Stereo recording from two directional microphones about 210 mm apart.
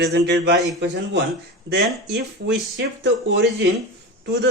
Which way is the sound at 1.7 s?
55° right (ahead or behind).